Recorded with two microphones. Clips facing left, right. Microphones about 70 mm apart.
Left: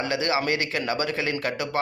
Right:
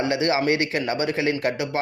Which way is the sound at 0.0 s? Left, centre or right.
Right.